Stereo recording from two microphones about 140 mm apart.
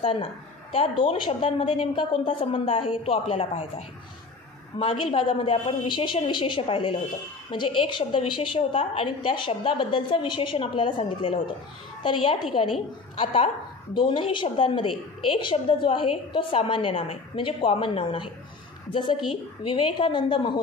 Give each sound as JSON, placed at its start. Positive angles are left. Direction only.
{"t": 0.0, "sound": "a woman's voice", "side_deg": 40}